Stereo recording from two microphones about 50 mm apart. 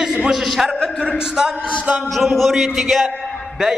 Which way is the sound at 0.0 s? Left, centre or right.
Centre.